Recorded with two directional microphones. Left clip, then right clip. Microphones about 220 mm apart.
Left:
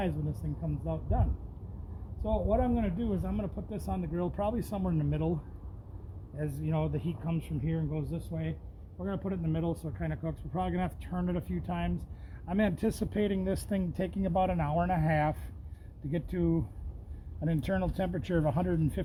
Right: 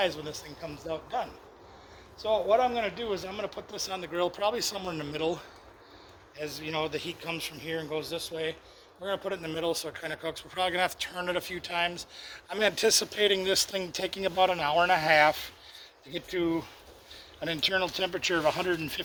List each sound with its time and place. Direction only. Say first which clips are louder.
0.0 s speech: right 6 dB; 5° right (ahead or behind)
2.2 s speech: right 6 dB; centre (ahead or behind); by 5.3 s 15° right (ahead or behind)
6.4 s speech: right 3 dB; 5° right (ahead or behind)